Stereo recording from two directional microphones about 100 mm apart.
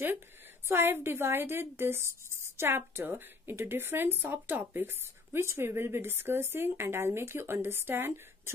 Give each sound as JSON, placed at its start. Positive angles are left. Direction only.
{"t": 0.7, "sound": "a woman's voice", "side_deg": -20}